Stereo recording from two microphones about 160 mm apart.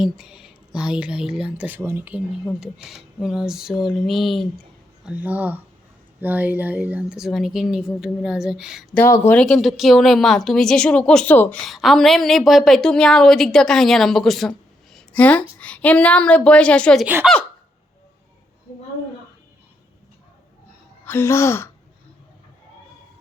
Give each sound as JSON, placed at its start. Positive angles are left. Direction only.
{"t": 0.0, "sound": "a woman's voice", "side_deg": -5}
{"t": 9.0, "sound": "a woman's voice", "side_deg": 15}
{"t": 21.0, "sound": "a woman's voice", "side_deg": 15}